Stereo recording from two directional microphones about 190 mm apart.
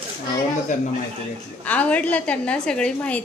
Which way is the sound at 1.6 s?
10° left (ahead or behind).